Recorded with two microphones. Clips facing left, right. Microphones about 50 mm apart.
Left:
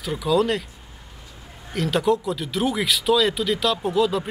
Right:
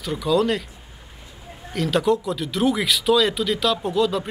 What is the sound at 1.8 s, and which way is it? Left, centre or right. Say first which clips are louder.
Speech: right 1 dB; centre.